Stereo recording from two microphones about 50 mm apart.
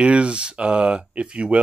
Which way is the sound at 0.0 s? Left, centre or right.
Right.